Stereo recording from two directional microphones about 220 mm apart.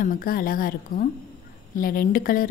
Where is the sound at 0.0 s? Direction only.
40° left (ahead or behind).